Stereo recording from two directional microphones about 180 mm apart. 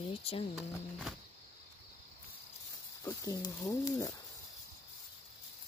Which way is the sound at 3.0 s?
20° left (ahead or behind).